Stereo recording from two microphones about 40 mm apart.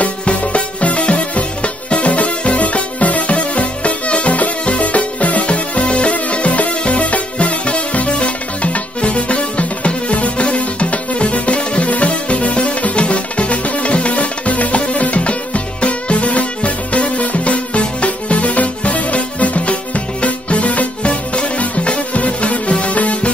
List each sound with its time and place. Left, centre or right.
0.0 s music: left